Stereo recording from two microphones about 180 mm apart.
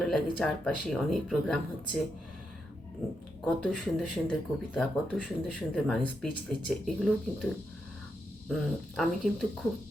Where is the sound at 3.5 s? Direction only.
Centre (ahead or behind).